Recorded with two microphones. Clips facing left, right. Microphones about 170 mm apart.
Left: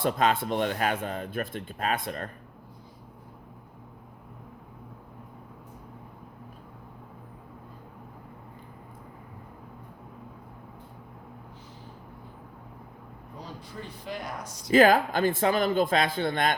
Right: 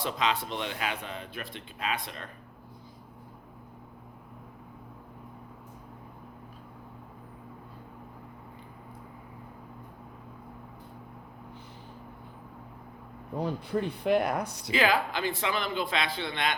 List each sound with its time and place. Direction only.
0.0 s a man's voice: 50° left (ahead or behind)
13.3 s speech: 60° right (ahead or behind)
14.7 s a man's voice: 45° left (ahead or behind)